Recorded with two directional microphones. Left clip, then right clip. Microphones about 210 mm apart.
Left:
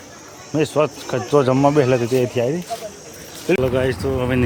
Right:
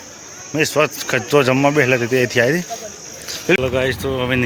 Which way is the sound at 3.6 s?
15° left (ahead or behind).